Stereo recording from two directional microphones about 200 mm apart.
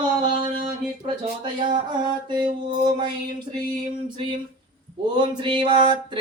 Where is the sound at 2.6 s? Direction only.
25° right (ahead or behind).